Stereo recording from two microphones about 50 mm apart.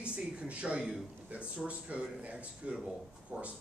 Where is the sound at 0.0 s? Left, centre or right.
Right.